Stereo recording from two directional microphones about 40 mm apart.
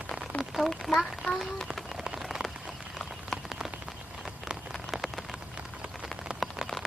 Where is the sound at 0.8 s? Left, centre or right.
Centre.